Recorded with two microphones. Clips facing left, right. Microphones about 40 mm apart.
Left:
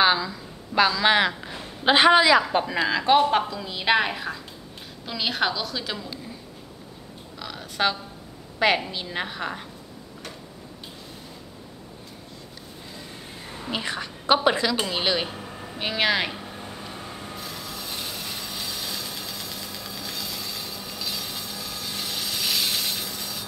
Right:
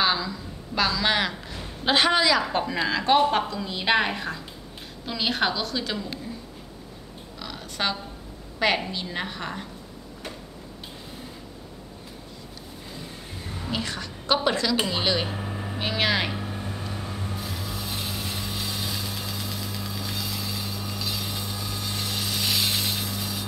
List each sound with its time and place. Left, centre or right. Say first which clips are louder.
0.0 s a sound: left 3 dB; centre
1.4 s a man's voice: left 4 dB; centre
7.3 s a sound: left 3 dB; centre
8.5 s a woman's voice: left 2 dB; centre
13.7 s a woman's voice: left 2 dB; centre
15.2 s vehicle: right 3 dB; centre
15.8 s a woman's voice: left 1 dB; centre
16.3 s rub: right 3 dB; centre